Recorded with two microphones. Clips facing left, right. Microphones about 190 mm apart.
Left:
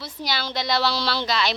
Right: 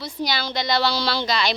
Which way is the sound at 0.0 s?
5° left (ahead or behind).